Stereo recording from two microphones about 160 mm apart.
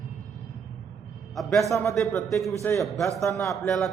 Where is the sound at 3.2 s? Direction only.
20° left (ahead or behind).